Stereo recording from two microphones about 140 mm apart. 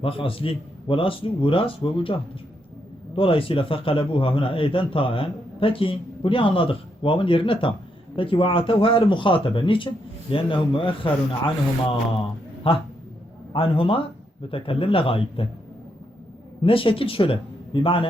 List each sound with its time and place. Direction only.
0.0 s a man's voice: 40° left (ahead or behind)
3.2 s a man's voice: 40° left (ahead or behind)
16.6 s a man's voice: 40° left (ahead or behind)